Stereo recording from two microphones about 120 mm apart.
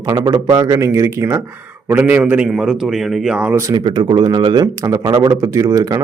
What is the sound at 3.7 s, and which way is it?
Speech, 35° right (ahead or behind).